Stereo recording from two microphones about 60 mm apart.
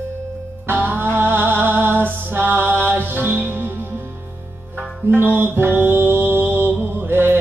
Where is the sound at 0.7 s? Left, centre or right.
Right.